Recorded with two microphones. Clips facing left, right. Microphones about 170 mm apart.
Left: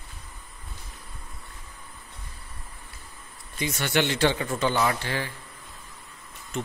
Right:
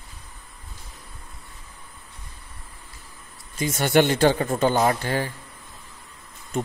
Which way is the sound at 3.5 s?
45° right (ahead or behind).